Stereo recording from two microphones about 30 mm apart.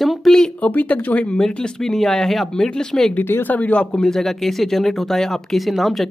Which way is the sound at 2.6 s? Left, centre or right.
Centre.